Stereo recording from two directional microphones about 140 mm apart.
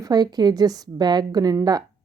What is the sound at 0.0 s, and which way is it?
A woman's voice, 30° right (ahead or behind).